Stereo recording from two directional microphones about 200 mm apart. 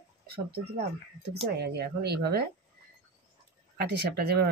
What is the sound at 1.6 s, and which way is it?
Speech, 55° right (ahead or behind).